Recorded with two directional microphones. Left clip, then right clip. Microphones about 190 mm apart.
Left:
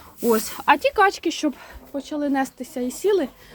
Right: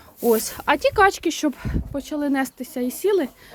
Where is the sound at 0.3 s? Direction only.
15° right (ahead or behind).